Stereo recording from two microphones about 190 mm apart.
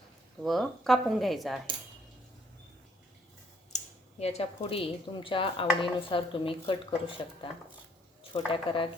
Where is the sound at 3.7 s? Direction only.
35° left (ahead or behind).